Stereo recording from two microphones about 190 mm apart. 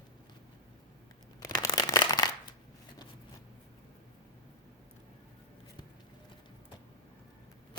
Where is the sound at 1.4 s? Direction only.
20° left (ahead or behind).